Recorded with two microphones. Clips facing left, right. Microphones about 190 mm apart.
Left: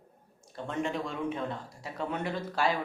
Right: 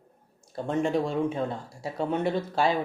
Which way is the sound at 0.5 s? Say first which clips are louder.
Right 7 dB; 40° right (ahead or behind).